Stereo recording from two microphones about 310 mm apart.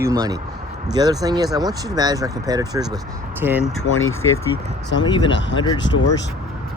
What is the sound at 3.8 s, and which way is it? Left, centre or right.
Speech, left.